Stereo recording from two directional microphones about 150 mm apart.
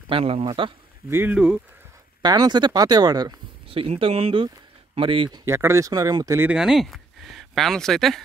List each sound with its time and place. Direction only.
0.1 s speech: 40° right (ahead or behind)
1.1 s speech: 10° right (ahead or behind)
2.2 s speech: 25° right (ahead or behind)
5.4 s speech: 20° right (ahead or behind)
6.5 s speech: centre (ahead or behind)